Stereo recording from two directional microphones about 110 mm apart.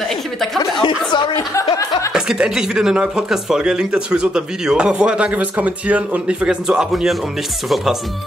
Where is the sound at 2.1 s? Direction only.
5° right (ahead or behind).